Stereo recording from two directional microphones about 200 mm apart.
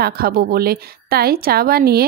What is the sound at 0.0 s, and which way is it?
A woman's voice, 50° right (ahead or behind).